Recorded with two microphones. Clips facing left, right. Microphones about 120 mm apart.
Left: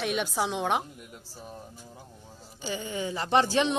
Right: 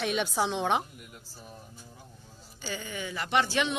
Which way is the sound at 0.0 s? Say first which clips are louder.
Even; centre (ahead or behind).